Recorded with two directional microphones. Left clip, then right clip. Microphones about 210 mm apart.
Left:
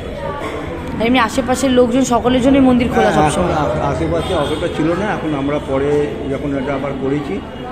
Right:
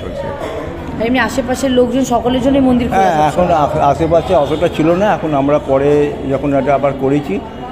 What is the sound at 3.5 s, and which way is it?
Speech, 55° right (ahead or behind).